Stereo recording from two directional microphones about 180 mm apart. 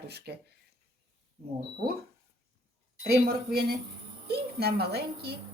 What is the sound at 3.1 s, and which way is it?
A woman's voice, 60° right (ahead or behind).